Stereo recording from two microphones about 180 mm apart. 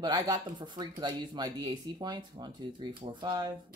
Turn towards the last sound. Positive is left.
turn(degrees=-25)  # may be behind; listen again after turning